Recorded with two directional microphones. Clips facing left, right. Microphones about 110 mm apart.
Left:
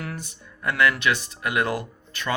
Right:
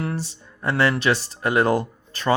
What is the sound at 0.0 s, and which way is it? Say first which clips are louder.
Speech: right 7 dB; 30° right (ahead or behind).